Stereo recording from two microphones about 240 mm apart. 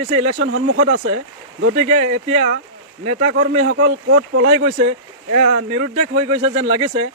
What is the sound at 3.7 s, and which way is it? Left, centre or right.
Speech, right.